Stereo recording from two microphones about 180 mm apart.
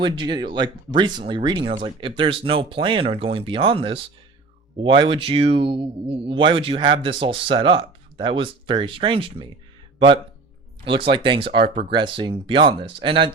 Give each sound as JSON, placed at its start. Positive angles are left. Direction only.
{"t": 0.0, "sound": "speech", "side_deg": -25}
{"t": 10.8, "sound": "speech", "side_deg": -30}